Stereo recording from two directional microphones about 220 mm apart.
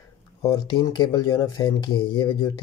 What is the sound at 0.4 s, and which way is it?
Speech, 15° left (ahead or behind).